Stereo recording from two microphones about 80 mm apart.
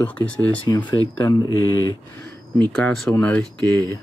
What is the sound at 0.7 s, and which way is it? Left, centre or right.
Speech, left.